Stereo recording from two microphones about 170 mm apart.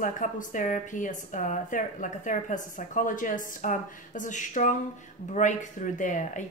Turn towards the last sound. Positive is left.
turn(degrees=50)  # may be behind; listen again after turning